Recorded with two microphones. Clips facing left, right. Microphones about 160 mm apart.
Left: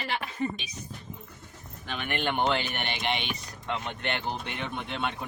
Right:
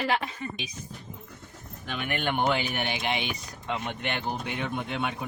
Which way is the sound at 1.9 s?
10° right (ahead or behind).